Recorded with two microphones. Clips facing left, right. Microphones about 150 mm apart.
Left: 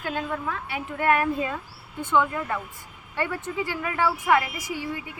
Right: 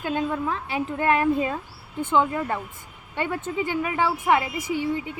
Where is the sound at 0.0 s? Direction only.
25° right (ahead or behind).